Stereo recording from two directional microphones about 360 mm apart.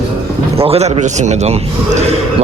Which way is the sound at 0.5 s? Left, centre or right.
Centre.